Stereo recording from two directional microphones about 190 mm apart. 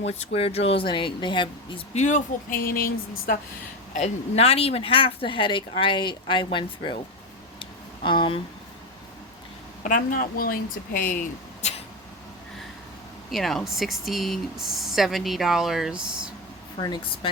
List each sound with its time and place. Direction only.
0.0 s speech: 35° left (ahead or behind); by 3.3 s 50° left (ahead or behind)
3.9 s speech: 35° left (ahead or behind)
7.6 s a sound: 25° left (ahead or behind)
9.8 s a woman's voice: 45° left (ahead or behind)
13.3 s speech: centre (ahead or behind)
16.7 s speech: 20° left (ahead or behind)